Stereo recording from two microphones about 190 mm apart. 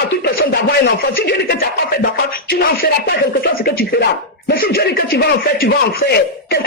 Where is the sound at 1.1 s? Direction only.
55° left (ahead or behind).